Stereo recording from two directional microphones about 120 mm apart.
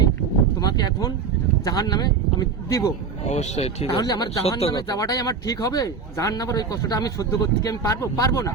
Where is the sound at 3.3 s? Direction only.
65° left (ahead or behind).